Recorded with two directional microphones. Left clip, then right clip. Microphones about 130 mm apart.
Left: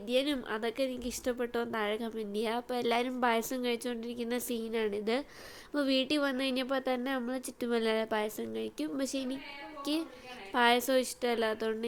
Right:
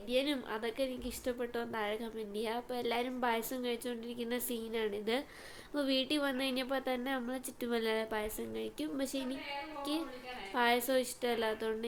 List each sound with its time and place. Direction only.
0.1 s speech: 45° left (ahead or behind)
10.5 s speech: 50° left (ahead or behind)